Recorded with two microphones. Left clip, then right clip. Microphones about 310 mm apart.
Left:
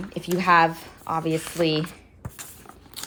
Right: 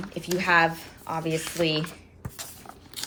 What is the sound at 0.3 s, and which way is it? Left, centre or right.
Speech, left.